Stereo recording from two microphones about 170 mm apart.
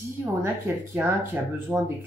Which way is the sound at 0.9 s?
15° right (ahead or behind).